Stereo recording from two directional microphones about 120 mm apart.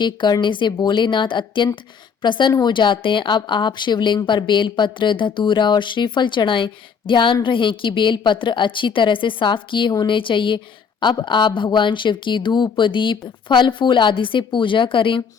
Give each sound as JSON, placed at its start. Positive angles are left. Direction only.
{"t": 0.0, "sound": "a woman's voice", "side_deg": 35}